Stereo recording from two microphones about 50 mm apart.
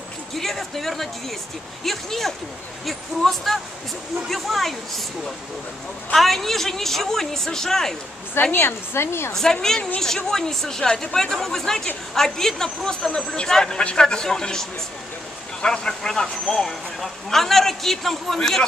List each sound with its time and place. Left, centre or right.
0.4 s a sound: centre
1.9 s speech: centre
8.4 s a woman's voice: left
9.3 s speech: centre